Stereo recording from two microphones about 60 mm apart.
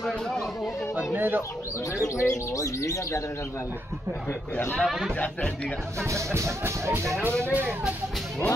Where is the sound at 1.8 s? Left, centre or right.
Left.